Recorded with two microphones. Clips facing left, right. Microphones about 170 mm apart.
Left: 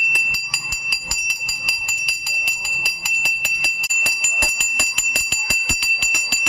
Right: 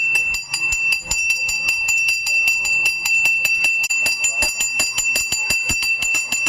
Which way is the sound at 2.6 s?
15° right (ahead or behind).